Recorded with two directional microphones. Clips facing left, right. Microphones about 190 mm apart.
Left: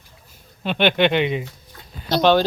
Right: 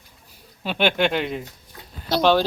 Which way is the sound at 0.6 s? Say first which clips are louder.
Left 3 dB; 5° right (ahead or behind).